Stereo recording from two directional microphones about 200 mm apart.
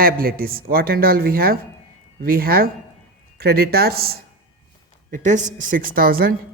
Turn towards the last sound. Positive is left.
turn(degrees=-45)  # may be behind; listen again after turning